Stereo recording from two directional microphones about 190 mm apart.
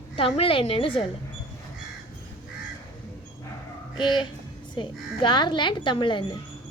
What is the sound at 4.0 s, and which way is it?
Speech, 25° left (ahead or behind).